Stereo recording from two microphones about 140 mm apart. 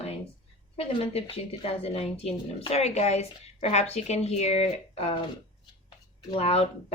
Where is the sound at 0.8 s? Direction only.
45° left (ahead or behind).